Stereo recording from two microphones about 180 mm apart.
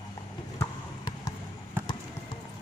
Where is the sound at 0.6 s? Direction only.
20° left (ahead or behind).